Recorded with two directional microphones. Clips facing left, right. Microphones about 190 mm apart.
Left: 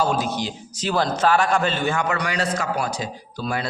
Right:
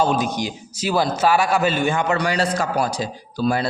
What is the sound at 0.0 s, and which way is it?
A man's voice, 20° right (ahead or behind).